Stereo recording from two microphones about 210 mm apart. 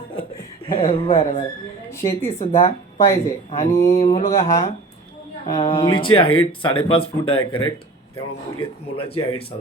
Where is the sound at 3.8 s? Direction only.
30° left (ahead or behind).